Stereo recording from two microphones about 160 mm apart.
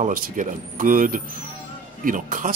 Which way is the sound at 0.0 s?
55° right (ahead or behind).